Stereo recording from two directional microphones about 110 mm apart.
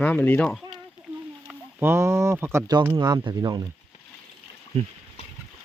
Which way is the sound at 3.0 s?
40° right (ahead or behind).